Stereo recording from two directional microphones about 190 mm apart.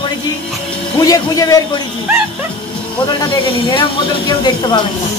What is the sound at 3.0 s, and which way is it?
Speech, 25° left (ahead or behind).